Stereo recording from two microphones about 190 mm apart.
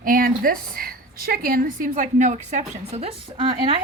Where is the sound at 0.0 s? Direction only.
50° right (ahead or behind); by 3.8 s 25° right (ahead or behind).